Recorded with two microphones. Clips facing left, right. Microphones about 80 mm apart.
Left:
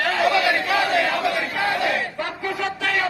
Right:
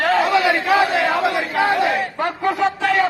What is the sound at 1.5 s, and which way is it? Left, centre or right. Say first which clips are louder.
Battle cry: right 5 dB; right.